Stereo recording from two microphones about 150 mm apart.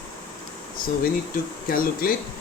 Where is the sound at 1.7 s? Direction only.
75° left (ahead or behind).